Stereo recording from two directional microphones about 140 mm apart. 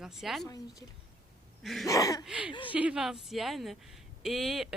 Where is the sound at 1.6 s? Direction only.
Centre (ahead or behind).